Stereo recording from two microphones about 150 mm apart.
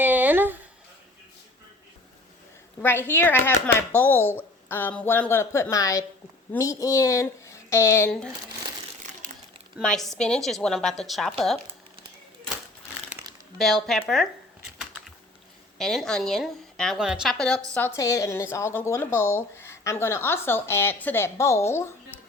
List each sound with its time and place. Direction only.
0.0 s a sound: 10° right (ahead or behind)
2.8 s speech: 15° left (ahead or behind)
9.8 s a woman's voice: 5° left (ahead or behind)
13.6 s a woman's voice: centre (ahead or behind)
15.8 s a woman's voice: 5° left (ahead or behind)
17.7 s speech: 15° left (ahead or behind)